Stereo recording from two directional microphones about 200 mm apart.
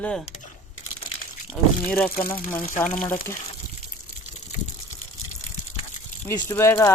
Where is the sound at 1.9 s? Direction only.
5° left (ahead or behind).